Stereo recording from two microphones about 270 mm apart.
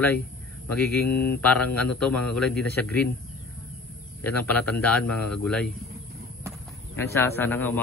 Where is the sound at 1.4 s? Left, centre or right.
Centre.